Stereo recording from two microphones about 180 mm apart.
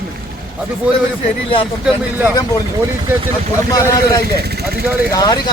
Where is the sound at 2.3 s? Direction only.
20° left (ahead or behind).